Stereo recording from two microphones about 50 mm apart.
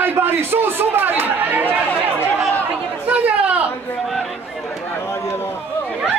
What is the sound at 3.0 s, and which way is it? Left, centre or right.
Chatter, right.